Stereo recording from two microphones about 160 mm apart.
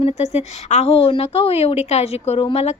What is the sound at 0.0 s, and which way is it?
A woman's voice, 45° left (ahead or behind).